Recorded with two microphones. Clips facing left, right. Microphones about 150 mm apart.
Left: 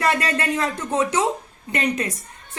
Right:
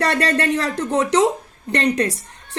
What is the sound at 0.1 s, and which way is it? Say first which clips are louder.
Speech: right 3 dB; 70° right (ahead or behind).